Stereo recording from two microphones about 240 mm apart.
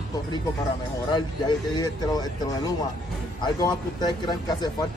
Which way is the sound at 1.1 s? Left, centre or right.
Centre.